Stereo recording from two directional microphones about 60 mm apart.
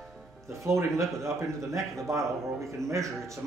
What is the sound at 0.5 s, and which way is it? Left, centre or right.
Speech, right.